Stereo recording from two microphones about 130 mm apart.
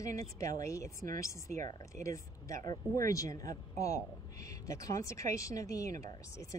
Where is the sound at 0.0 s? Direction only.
25° left (ahead or behind).